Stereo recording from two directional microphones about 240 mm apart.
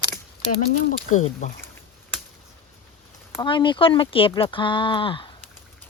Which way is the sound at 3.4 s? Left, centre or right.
Centre.